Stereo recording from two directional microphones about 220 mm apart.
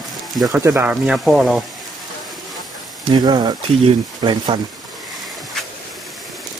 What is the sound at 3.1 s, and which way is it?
Speech, 20° right (ahead or behind).